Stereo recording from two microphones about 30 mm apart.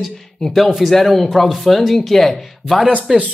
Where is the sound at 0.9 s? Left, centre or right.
Centre.